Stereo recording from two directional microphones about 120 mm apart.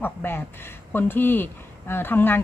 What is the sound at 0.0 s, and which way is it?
A woman's voice, 15° left (ahead or behind).